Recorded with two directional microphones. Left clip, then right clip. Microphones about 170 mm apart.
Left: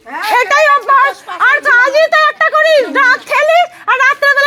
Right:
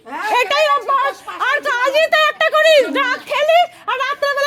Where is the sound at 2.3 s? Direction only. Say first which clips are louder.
Left 3 dB; 20° right (ahead or behind).